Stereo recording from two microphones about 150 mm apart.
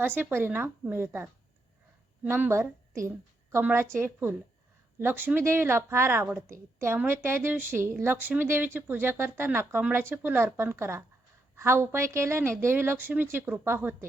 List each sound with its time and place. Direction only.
0.0 s a woman's voice: 15° right (ahead or behind)